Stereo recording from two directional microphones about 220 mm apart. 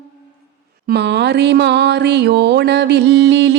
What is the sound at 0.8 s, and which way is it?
Music, 50° right (ahead or behind).